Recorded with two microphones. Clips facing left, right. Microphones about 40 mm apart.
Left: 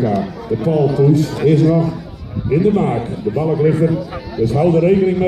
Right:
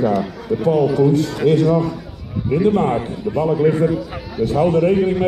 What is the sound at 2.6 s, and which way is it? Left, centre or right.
Speech, right.